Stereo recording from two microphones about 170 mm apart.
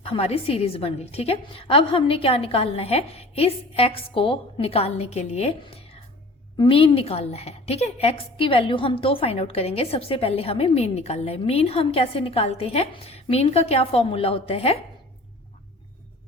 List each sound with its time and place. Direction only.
0.0 s a woman's voice: 35° left (ahead or behind)